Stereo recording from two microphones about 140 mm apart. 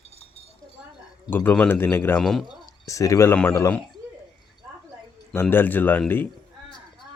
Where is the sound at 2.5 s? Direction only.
25° left (ahead or behind).